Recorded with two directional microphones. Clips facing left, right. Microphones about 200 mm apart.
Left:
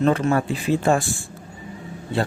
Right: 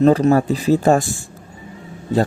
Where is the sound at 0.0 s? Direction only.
35° right (ahead or behind).